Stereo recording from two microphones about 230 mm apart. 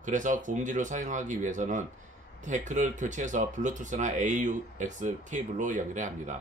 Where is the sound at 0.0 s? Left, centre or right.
Right.